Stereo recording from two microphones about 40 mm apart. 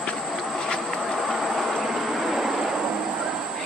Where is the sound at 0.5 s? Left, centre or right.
Centre.